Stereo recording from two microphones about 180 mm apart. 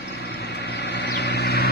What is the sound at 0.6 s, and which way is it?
Vehicle, 65° left (ahead or behind).